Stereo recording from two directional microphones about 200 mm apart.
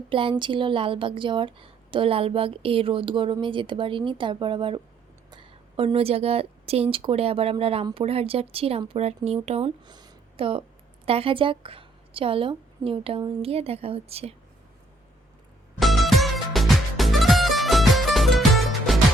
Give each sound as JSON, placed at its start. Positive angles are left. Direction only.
{"t": 0.1, "sound": "a woman's voice", "side_deg": -25}
{"t": 15.8, "sound": "music", "side_deg": 0}